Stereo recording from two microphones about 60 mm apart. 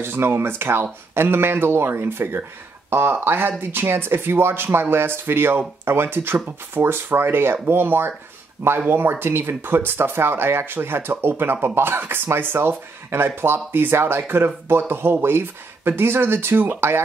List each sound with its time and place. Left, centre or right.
0.0 s speech: right